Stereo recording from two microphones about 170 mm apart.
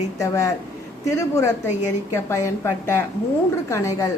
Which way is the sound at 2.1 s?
15° left (ahead or behind).